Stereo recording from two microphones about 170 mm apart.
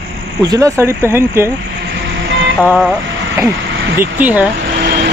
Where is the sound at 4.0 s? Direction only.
10° right (ahead or behind).